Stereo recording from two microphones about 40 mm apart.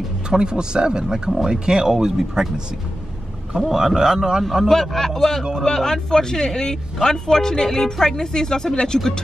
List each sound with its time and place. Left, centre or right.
0.3 s speech: centre
4.6 s speech: centre